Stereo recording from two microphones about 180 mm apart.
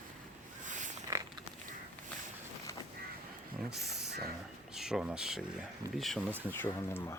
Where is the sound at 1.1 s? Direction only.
15° right (ahead or behind).